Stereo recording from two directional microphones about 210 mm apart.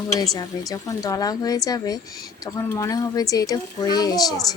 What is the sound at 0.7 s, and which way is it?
A woman's voice, 15° left (ahead or behind).